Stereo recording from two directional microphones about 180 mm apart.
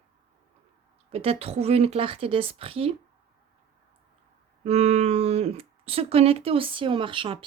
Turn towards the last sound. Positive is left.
turn(degrees=-30)  # may be behind; listen again after turning